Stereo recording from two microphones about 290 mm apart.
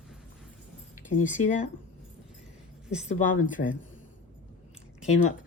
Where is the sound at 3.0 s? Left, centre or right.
Left.